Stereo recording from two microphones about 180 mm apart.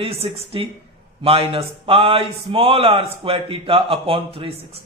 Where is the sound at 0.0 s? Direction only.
35° right (ahead or behind).